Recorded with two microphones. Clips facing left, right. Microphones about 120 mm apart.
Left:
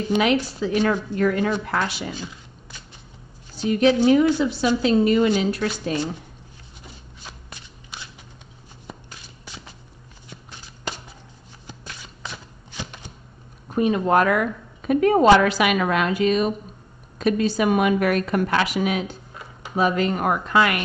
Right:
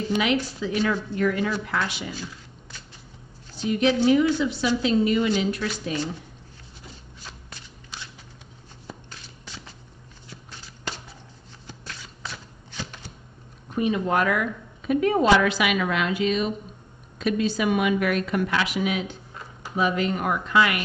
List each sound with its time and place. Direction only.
0.1 s a woman's voice: 20° left (ahead or behind)
0.6 s a woman's voice: 45° left (ahead or behind)
3.6 s a woman's voice: 45° left (ahead or behind)
10.3 s walk: 15° left (ahead or behind)
11.6 s shuffling cards: 15° left (ahead or behind)
13.7 s a woman's voice: 45° left (ahead or behind)